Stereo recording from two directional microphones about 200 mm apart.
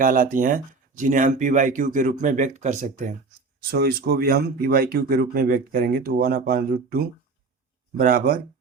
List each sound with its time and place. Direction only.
0.0 s speech: 40° right (ahead or behind)
3.6 s speech: 50° right (ahead or behind)